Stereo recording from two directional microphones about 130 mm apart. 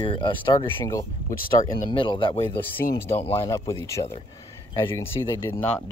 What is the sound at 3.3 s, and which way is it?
Speech, 25° left (ahead or behind).